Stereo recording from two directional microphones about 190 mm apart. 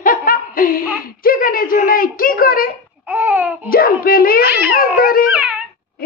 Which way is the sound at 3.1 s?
10° right (ahead or behind).